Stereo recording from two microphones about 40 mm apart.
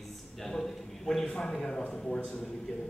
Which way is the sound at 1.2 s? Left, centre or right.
Left.